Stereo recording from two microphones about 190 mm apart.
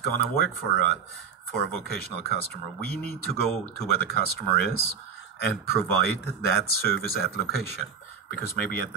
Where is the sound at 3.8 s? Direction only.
55° left (ahead or behind).